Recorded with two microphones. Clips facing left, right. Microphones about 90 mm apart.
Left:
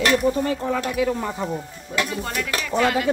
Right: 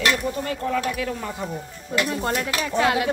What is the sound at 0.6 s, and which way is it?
Speech, 15° left (ahead or behind).